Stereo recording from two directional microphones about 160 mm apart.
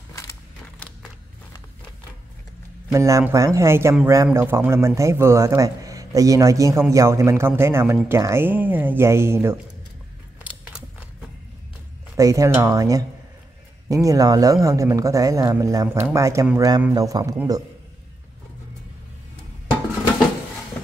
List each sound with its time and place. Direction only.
2.9 s a man's voice: 20° right (ahead or behind)
10.4 s biting: 5° right (ahead or behind)
12.2 s speech: 20° right (ahead or behind)